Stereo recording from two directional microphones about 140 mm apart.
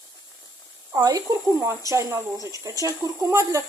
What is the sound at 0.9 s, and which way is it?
Speech, 25° right (ahead or behind).